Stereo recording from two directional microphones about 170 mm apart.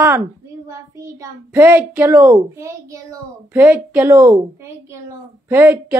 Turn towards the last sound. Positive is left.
turn(degrees=-10)  # may be behind; listen again after turning